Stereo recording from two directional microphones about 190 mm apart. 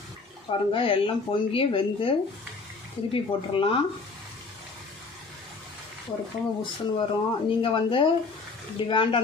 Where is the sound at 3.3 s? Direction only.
30° left (ahead or behind).